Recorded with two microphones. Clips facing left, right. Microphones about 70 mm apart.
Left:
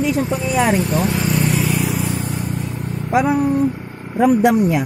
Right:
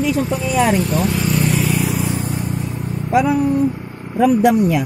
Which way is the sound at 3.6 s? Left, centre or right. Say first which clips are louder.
Even; centre.